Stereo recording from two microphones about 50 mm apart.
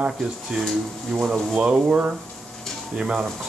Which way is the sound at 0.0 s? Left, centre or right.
Centre.